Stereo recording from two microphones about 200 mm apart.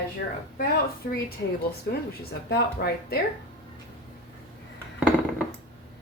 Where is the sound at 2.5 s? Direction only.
50° left (ahead or behind).